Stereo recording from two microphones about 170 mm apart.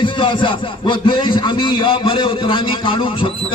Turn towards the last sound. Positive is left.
turn(degrees=30)  # may be behind; listen again after turning